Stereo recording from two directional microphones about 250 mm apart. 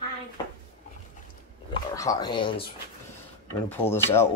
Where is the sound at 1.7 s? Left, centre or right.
Centre.